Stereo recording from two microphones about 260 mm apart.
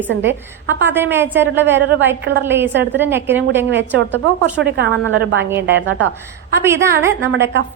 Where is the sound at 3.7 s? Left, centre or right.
Right.